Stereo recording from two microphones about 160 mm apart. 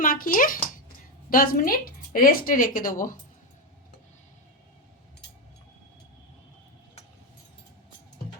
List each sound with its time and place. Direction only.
0.0 s a woman's voice: 60° left (ahead or behind)